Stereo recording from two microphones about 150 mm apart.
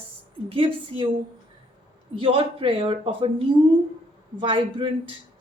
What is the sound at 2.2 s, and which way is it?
Speech, 35° right (ahead or behind).